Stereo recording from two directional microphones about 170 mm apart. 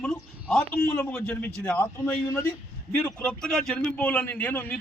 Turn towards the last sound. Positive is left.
turn(degrees=10)  # may be behind; listen again after turning